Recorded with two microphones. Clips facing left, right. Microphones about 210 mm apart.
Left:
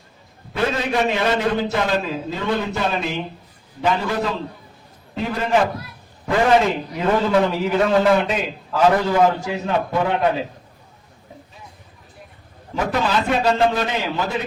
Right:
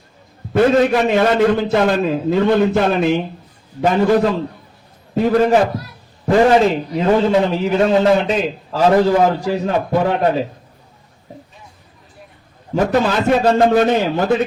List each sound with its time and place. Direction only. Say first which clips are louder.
0.5 s a man's voice: right 9 dB; 50° right (ahead or behind)
6.2 s a man's voice: right 5 dB; 35° right (ahead or behind)
12.7 s a man's voice: right 5 dB; 45° right (ahead or behind)